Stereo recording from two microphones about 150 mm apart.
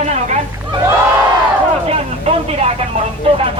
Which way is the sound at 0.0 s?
50° right (ahead or behind).